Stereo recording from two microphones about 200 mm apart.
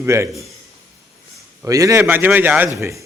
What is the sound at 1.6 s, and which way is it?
A man's voice, 15° right (ahead or behind).